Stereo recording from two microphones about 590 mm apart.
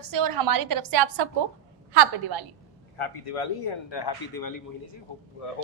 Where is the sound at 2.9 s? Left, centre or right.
Left.